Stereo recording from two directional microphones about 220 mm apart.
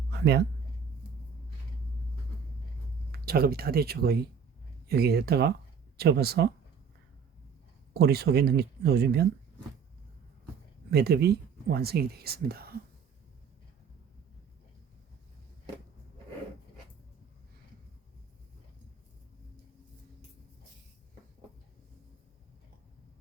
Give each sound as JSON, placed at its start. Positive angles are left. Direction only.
{"t": 0.1, "sound": "a sound", "side_deg": -50}
{"t": 3.1, "sound": "speech", "side_deg": -45}
{"t": 7.9, "sound": "speech", "side_deg": -45}
{"t": 10.9, "sound": "speech", "side_deg": -45}